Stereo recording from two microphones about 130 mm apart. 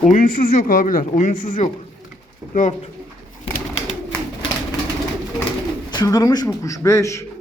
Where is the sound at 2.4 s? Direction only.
20° right (ahead or behind).